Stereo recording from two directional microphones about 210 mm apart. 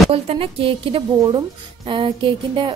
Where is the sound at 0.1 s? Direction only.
25° right (ahead or behind).